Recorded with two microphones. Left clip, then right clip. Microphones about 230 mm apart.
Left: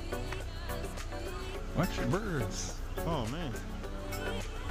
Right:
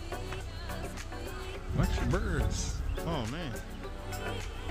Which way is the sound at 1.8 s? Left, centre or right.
Centre.